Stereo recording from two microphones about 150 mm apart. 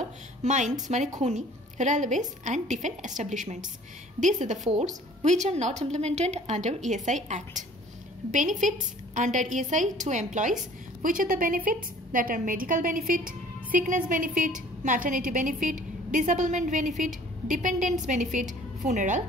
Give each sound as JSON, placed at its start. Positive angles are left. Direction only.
{"t": 0.4, "sound": "a woman's voice", "side_deg": -50}